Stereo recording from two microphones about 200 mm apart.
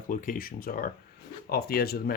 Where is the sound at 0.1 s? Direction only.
40° left (ahead or behind).